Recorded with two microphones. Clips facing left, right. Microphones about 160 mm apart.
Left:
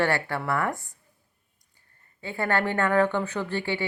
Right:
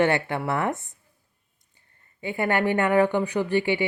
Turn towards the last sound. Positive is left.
turn(degrees=-15)  # may be behind; listen again after turning